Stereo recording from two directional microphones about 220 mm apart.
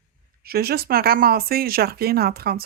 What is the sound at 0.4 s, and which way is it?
Speech, 45° right (ahead or behind).